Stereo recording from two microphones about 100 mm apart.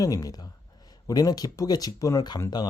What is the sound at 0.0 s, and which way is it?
Speech, 35° left (ahead or behind).